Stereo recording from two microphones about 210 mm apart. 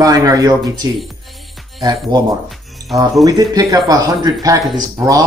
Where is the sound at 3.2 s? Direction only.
15° right (ahead or behind).